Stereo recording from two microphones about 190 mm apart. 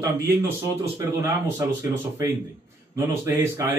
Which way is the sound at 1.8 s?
15° right (ahead or behind).